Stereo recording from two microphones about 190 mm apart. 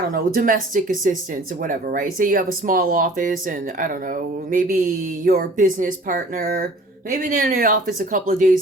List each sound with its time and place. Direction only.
0.1 s speech: 45° right (ahead or behind)